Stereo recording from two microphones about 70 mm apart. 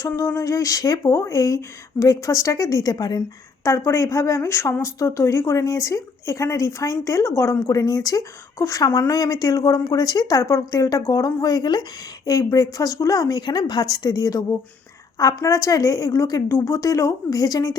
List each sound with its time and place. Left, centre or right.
0.2 s speech: left
2.9 s a woman's voice: left
3.2 s speech: left
7.7 s a woman's voice: left
8.5 s a woman's voice: left
8.8 s a woman's voice: left
16.5 s a woman's voice: left